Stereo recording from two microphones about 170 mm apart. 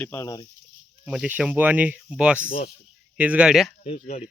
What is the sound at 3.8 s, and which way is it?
Speech, 40° left (ahead or behind).